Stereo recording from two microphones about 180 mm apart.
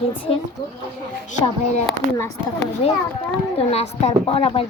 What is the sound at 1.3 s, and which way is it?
Speech, 40° left (ahead or behind).